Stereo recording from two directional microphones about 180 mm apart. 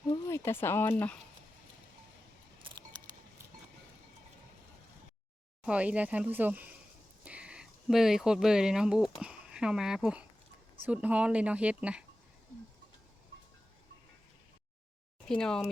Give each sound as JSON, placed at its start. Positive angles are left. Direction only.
{"t": 0.1, "sound": "speech", "side_deg": 15}
{"t": 2.6, "sound": "camera", "side_deg": -30}
{"t": 5.6, "sound": "speech", "side_deg": -5}
{"t": 15.3, "sound": "speech", "side_deg": 5}